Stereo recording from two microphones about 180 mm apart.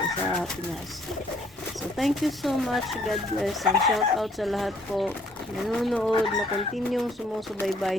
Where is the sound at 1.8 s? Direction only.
Centre (ahead or behind).